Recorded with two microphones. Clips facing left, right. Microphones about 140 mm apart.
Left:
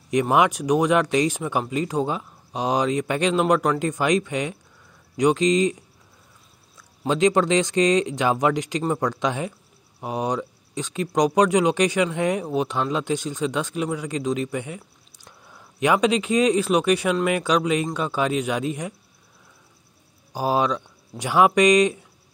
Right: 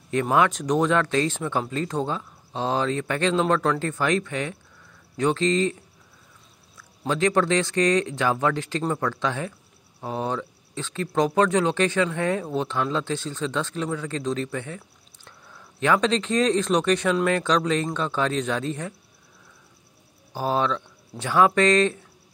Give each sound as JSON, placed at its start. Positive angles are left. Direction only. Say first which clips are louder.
{"t": 0.1, "sound": "speech", "louder": "left 2 dB", "side_deg": 15}
{"t": 7.1, "sound": "speech", "louder": "left 3 dB", "side_deg": 20}
{"t": 20.3, "sound": "speech", "louder": "left 2 dB", "side_deg": 10}